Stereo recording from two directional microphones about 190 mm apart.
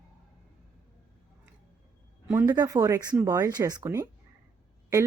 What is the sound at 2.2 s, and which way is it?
Speech, 15° right (ahead or behind).